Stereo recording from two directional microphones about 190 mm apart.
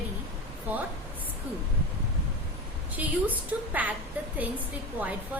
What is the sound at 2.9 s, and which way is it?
A woman's voice, 10° right (ahead or behind).